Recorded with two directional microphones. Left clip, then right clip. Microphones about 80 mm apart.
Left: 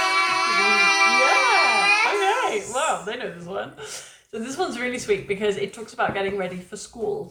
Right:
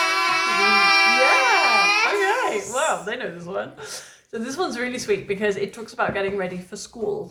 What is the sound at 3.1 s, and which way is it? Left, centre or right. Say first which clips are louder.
A woman's voice: right 2 dB; centre.